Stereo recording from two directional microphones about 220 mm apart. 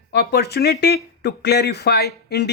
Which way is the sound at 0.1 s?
50° left (ahead or behind).